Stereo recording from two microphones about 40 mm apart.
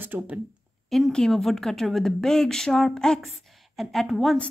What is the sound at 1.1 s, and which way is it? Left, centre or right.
A woman's voice, centre.